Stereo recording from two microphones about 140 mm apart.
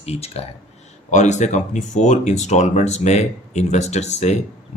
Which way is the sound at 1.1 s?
60° left (ahead or behind).